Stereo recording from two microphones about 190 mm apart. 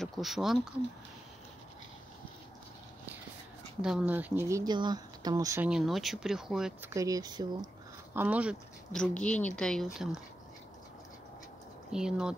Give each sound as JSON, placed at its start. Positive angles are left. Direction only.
{"t": 0.0, "sound": "speech", "side_deg": 0}
{"t": 3.8, "sound": "speech", "side_deg": -5}
{"t": 5.7, "sound": "speech", "side_deg": 0}
{"t": 6.9, "sound": "speech", "side_deg": -15}
{"t": 8.1, "sound": "speech", "side_deg": -10}
{"t": 8.9, "sound": "speech", "side_deg": 5}
{"t": 11.9, "sound": "speech", "side_deg": -5}